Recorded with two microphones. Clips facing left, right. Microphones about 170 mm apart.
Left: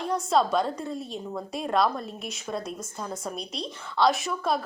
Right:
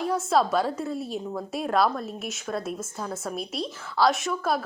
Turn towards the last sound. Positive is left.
turn(degrees=0)  # may be behind; listen again after turning